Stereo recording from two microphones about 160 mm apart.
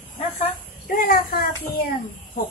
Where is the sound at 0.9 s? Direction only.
65° left (ahead or behind).